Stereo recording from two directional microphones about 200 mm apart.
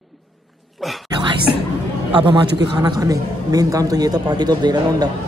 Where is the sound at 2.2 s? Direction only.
25° right (ahead or behind).